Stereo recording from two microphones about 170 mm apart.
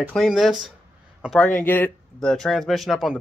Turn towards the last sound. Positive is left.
turn(degrees=0)  # may be behind; listen again after turning